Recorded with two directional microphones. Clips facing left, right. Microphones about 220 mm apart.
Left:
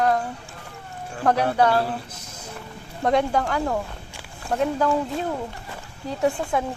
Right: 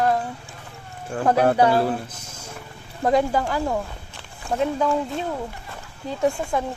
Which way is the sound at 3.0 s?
Centre (ahead or behind).